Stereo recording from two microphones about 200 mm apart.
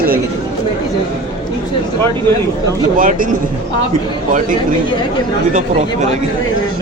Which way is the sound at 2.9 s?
45° right (ahead or behind).